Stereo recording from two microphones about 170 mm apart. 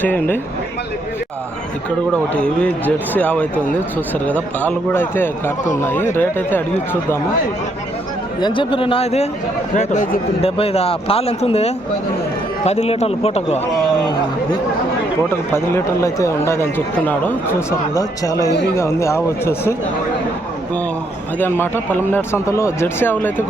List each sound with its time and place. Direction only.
0.0 s speech: 10° left (ahead or behind)
2.3 s speech: 5° left (ahead or behind)
8.4 s speech: 25° left (ahead or behind)
9.7 s speech: 50° left (ahead or behind)
10.4 s speech: 35° left (ahead or behind)
15.3 s speech: 15° left (ahead or behind)
21.3 s speech: 10° left (ahead or behind)